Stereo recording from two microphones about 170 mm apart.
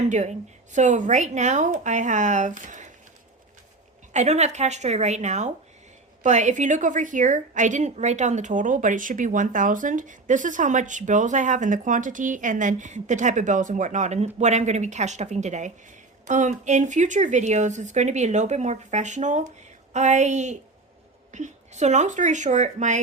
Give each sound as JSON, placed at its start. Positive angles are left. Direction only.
{"t": 0.0, "sound": "a woman's voice", "side_deg": -45}
{"t": 4.1, "sound": "a woman's voice", "side_deg": -40}